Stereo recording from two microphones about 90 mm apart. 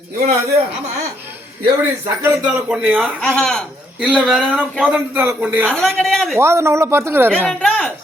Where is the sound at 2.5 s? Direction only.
10° right (ahead or behind).